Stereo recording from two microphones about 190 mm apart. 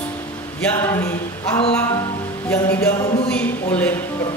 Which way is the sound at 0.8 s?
10° left (ahead or behind).